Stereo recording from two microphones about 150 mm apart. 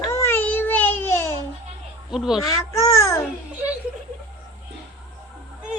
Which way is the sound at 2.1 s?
Centre (ahead or behind).